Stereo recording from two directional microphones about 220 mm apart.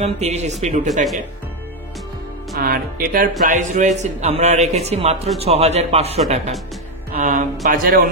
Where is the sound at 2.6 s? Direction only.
45° right (ahead or behind).